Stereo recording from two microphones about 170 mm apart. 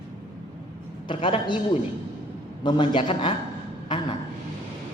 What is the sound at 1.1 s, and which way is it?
Speech, 30° left (ahead or behind).